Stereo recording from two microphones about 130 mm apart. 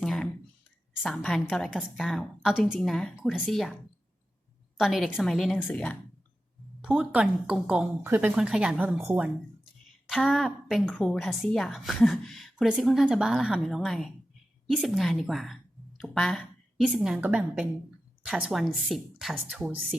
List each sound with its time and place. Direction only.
0.0 s a sound: 5° left (ahead or behind)
1.0 s a woman's voice: 5° left (ahead or behind)
4.8 s a woman's voice: centre (ahead or behind)
6.8 s speech: 10° right (ahead or behind)
8.0 s speech: 15° right (ahead or behind)
8.4 s speech: 5° right (ahead or behind)
10.1 s a woman's voice: centre (ahead or behind)